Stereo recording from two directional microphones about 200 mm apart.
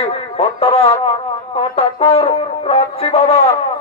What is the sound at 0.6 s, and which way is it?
Speech, 30° left (ahead or behind).